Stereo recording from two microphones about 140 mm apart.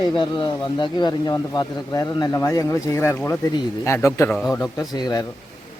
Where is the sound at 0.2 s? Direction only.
35° left (ahead or behind).